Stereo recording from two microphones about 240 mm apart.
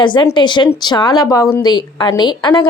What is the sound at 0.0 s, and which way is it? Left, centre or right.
A woman's voice, centre.